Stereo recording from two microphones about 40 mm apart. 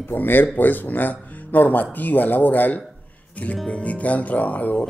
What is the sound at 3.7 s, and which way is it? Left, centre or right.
Speech, left.